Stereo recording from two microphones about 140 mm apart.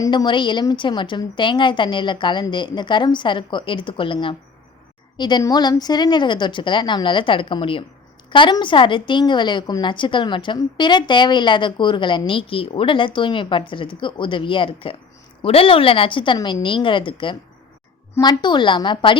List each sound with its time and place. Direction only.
0.0 s a woman's voice: 30° left (ahead or behind)